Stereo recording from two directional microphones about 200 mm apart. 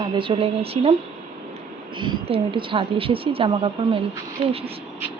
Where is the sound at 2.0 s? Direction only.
25° right (ahead or behind).